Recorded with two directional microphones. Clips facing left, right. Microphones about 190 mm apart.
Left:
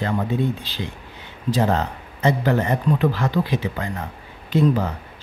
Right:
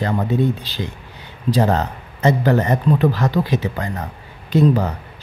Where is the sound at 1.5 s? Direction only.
40° right (ahead or behind).